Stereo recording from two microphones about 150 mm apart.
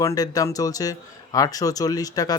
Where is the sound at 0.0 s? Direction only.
20° left (ahead or behind).